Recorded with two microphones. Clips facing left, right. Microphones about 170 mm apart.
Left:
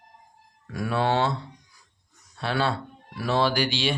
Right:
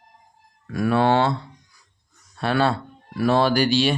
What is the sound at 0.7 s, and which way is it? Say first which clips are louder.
Speech: right 6 dB; 65° right (ahead or behind).